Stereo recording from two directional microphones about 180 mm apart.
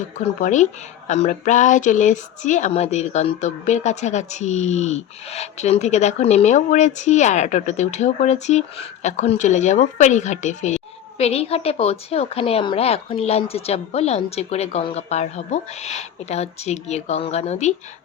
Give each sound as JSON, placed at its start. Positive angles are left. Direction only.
{"t": 0.2, "sound": "speech", "side_deg": 40}